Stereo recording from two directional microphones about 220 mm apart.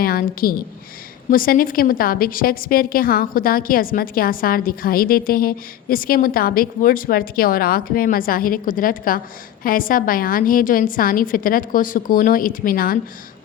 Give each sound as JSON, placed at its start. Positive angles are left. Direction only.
{"t": 0.0, "sound": "a woman's voice", "side_deg": 40}